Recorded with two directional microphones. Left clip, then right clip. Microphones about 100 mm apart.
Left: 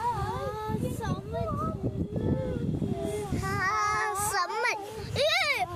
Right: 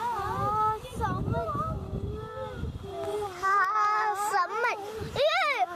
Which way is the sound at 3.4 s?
55° left (ahead or behind).